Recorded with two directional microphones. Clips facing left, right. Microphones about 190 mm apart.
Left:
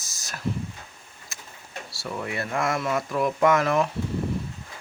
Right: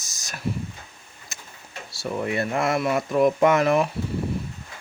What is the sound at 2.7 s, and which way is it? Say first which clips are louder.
Speech: right 4 dB; 15° right (ahead or behind).